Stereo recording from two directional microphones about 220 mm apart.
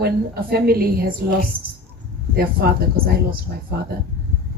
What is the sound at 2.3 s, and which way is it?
Speech, 45° right (ahead or behind).